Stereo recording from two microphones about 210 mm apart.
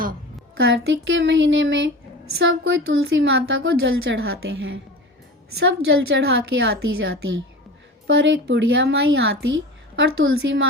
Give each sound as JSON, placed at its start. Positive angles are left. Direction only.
{"t": 0.5, "sound": "a woman's voice", "side_deg": -65}